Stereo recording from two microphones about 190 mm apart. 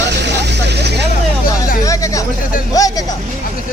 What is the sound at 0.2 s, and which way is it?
Vehicle, 65° right (ahead or behind).